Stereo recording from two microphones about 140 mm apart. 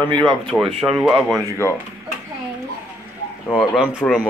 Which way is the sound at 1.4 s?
20° left (ahead or behind).